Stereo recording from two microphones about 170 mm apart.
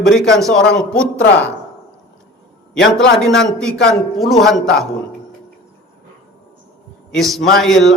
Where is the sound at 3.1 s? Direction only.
Centre (ahead or behind).